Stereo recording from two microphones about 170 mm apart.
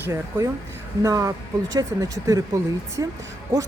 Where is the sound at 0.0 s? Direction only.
15° right (ahead or behind).